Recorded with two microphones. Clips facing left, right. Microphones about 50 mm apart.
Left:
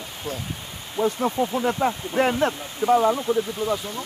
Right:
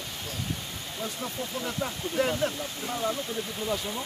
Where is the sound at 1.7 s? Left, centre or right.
Left.